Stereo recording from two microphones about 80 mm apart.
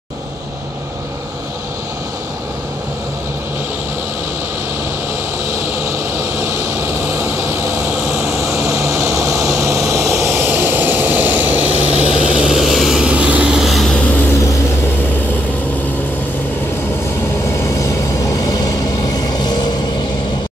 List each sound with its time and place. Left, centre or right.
5.6 s vehicle: right
8.1 s vehicle: centre
8.4 s vehicle: right; by 13.1 s centre
13.1 s vehicle: centre
18.3 s vehicle: left